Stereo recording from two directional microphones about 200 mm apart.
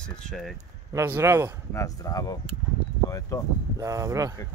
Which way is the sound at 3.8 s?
15° right (ahead or behind).